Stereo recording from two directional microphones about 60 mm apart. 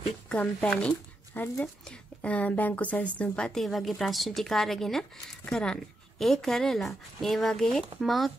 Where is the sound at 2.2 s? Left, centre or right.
Left.